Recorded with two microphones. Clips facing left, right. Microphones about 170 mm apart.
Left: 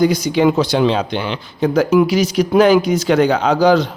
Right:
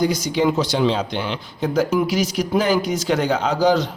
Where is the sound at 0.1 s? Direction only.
65° left (ahead or behind).